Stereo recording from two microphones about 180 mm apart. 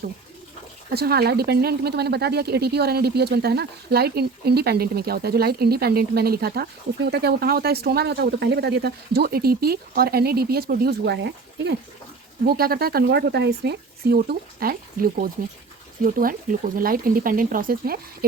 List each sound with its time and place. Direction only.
0.9 s a woman's voice: 60° right (ahead or behind)
12.5 s a woman's voice: 55° right (ahead or behind)